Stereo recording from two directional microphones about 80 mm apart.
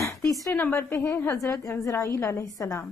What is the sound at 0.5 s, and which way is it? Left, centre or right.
A woman's voice, left.